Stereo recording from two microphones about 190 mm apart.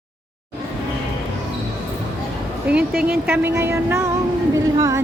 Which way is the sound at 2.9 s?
50° right (ahead or behind).